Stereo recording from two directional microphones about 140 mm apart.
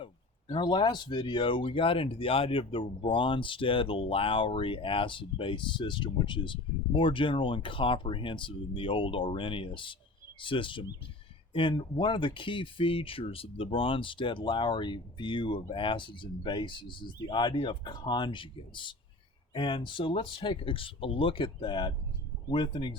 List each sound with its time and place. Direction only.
0.0 s speech: 35° left (ahead or behind)